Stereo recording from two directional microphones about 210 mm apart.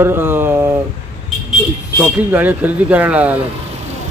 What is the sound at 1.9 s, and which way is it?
Speech, 10° right (ahead or behind).